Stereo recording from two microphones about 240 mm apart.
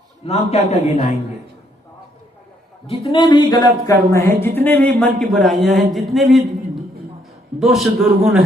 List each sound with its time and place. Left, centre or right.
0.3 s a man's voice: left
3.0 s speech: centre
7.6 s speech: centre